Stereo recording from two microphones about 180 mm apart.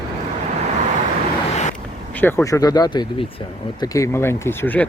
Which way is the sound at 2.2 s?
10° left (ahead or behind).